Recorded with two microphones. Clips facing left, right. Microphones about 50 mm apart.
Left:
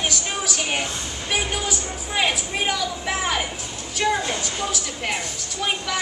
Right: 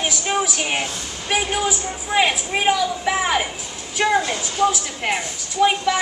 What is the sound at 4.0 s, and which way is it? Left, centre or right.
Speech, right.